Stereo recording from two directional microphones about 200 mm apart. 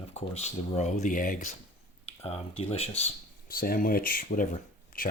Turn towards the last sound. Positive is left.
turn(degrees=45)  # may be behind; listen again after turning